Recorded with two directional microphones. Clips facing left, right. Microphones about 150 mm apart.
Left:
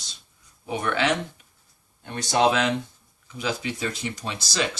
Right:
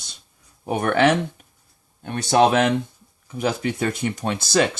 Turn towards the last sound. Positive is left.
turn(degrees=-55)  # may be behind; listen again after turning